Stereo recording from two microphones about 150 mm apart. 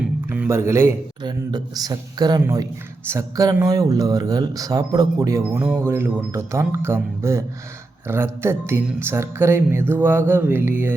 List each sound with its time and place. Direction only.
0.0 s music: 10° right (ahead or behind)
1.2 s speech: 30° right (ahead or behind)